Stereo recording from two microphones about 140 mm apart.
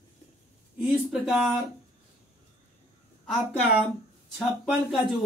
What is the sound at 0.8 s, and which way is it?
Speech, 5° right (ahead or behind).